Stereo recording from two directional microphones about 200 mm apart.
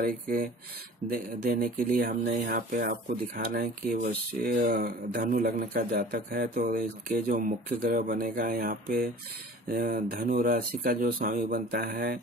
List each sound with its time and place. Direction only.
0.0 s speech: 45° right (ahead or behind)